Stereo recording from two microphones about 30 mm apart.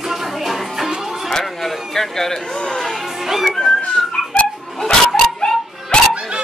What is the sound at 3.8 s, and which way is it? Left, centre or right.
Dog, left.